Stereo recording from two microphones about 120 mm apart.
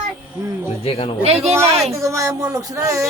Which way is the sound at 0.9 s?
55° left (ahead or behind).